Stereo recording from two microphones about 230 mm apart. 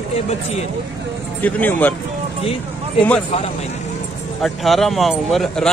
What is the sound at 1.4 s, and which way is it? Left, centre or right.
Speech, centre.